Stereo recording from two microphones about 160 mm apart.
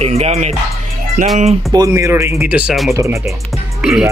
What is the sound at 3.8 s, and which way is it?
Speech, 5° right (ahead or behind).